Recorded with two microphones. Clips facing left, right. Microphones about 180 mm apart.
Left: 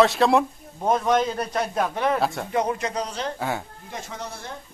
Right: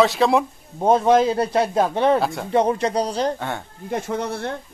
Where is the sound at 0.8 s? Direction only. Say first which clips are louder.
Right 5 dB; 30° right (ahead or behind).